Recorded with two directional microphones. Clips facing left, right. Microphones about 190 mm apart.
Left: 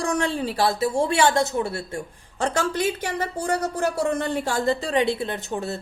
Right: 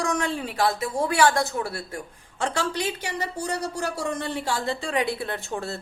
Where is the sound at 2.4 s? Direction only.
45° left (ahead or behind).